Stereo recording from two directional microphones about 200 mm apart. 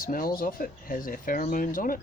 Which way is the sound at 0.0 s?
45° left (ahead or behind).